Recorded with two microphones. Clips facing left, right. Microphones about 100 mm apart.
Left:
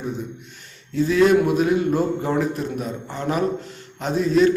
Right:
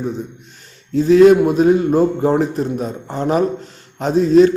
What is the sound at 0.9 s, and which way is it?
A man's voice, 40° right (ahead or behind).